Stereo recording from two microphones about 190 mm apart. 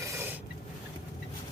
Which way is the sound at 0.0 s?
15° right (ahead or behind).